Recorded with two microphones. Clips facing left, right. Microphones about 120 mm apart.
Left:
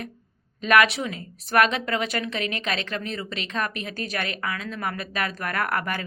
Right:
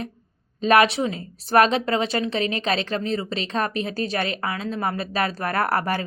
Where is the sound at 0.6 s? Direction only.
30° right (ahead or behind).